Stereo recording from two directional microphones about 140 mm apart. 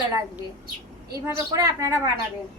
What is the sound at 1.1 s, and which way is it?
Speech, 25° right (ahead or behind).